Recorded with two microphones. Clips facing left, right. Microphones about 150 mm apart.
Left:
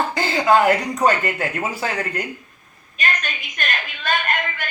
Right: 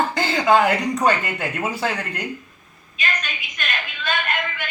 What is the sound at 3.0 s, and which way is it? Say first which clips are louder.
A woman's voice: left 2 dB; 50° left (ahead or behind).